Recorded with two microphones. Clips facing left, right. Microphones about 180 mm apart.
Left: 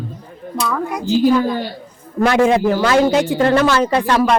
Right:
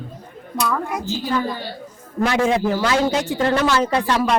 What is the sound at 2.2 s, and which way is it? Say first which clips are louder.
A woman's voice: left 5 dB; 60° left (ahead or behind).